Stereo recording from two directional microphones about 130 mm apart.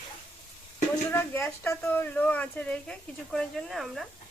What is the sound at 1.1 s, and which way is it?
Speech, 15° left (ahead or behind).